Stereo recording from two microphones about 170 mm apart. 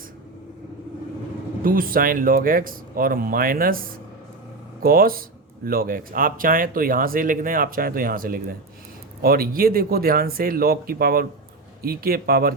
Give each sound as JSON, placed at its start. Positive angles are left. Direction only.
{"t": 1.6, "sound": "speech", "side_deg": -55}